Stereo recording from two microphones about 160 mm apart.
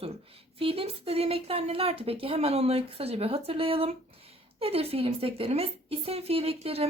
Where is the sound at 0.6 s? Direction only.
35° right (ahead or behind).